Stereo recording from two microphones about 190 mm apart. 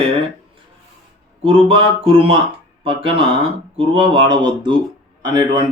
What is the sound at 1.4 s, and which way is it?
Speech, 25° right (ahead or behind).